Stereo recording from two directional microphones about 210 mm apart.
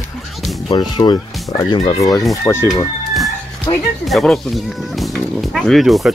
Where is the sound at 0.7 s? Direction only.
20° left (ahead or behind).